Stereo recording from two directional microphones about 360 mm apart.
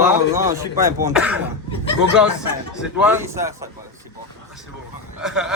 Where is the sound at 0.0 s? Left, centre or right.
Centre.